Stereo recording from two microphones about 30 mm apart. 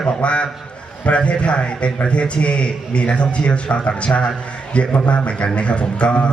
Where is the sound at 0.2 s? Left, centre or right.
Left.